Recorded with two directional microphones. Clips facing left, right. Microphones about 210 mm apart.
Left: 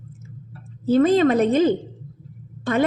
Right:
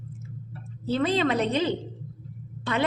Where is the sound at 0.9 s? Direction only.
45° left (ahead or behind).